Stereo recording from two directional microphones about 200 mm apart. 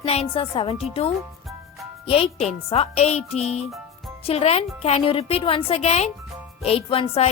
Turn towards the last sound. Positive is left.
turn(degrees=30)  # may be behind; listen again after turning